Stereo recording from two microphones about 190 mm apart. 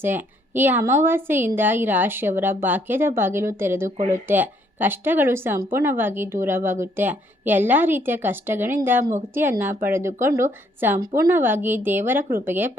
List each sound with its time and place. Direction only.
0.0 s a woman's voice: 10° right (ahead or behind)
3.9 s speech: 40° right (ahead or behind)
4.3 s a woman's voice: 10° right (ahead or behind)